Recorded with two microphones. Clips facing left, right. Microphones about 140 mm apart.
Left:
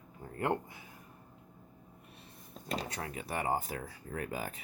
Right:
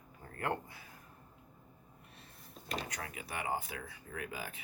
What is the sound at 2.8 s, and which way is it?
Speech, 30° left (ahead or behind).